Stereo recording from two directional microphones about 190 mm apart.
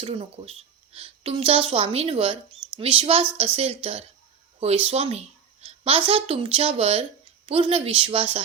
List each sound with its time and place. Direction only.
0.0 s a woman's voice: 30° right (ahead or behind)